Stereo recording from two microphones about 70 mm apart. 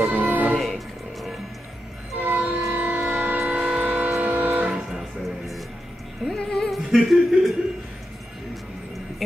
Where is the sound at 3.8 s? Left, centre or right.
Centre.